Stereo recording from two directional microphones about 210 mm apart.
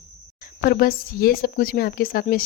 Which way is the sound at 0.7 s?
45° left (ahead or behind).